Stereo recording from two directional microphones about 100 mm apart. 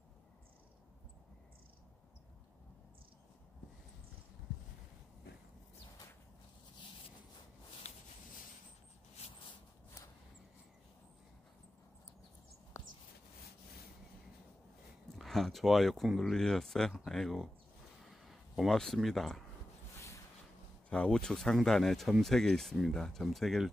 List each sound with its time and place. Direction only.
12.7 s a sound: 35° left (ahead or behind)
15.1 s speech: centre (ahead or behind)
20.9 s speech: 10° left (ahead or behind)